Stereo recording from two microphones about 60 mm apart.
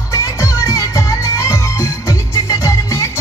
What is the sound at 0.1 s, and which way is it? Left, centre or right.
Music, left.